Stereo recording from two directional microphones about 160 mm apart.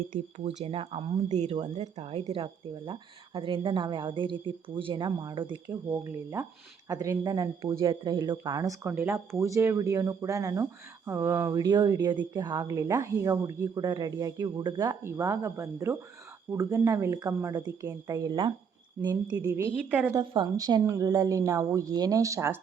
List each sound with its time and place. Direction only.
0.3 s speech: 40° right (ahead or behind)
5.7 s speech: 15° right (ahead or behind)
15.0 s speech: 15° right (ahead or behind)
19.1 s speech: 15° right (ahead or behind)
20.1 s speech: 25° right (ahead or behind)